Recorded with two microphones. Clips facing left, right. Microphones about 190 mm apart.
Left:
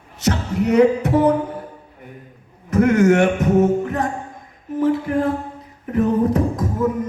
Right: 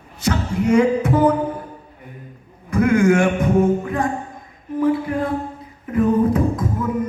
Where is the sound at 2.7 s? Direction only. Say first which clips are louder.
Left 1 dB; 40° left (ahead or behind).